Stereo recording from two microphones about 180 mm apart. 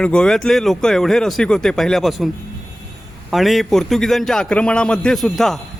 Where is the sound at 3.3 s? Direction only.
Centre (ahead or behind).